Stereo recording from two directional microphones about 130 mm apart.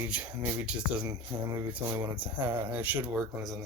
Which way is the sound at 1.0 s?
25° right (ahead or behind).